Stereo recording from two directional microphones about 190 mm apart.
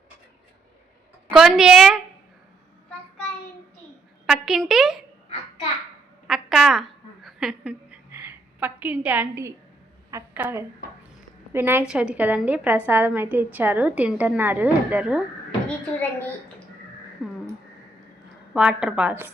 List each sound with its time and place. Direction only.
1.4 s a woman's voice: 5° right (ahead or behind)
4.3 s a woman's voice: centre (ahead or behind)
6.2 s a sound: centre (ahead or behind)
10.1 s a woman's voice: 15° right (ahead or behind)
16.0 s a woman's voice: 10° left (ahead or behind)
17.2 s a sound: centre (ahead or behind)
18.5 s a woman's voice: 5° right (ahead or behind)